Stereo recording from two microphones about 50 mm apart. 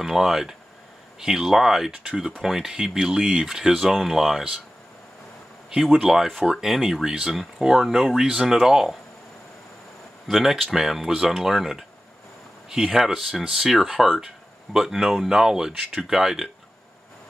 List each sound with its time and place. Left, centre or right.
0.0 s speech: centre
6.0 s speech: centre
10.2 s speech: centre
14.7 s speech: centre